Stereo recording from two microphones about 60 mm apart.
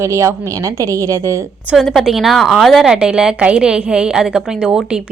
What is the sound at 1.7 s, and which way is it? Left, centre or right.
A woman's voice, centre.